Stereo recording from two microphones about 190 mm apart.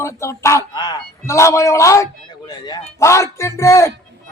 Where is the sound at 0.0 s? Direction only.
15° left (ahead or behind).